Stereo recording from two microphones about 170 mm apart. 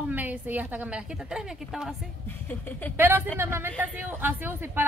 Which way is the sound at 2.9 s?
10° right (ahead or behind).